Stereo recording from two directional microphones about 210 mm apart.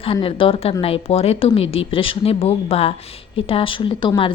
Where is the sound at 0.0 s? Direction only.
25° left (ahead or behind).